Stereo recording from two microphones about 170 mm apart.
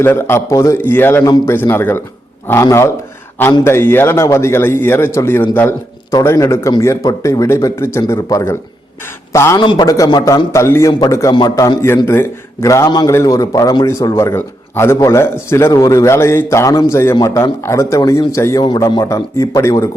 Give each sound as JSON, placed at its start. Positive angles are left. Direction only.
{"t": 0.0, "sound": "a man's voice", "side_deg": 15}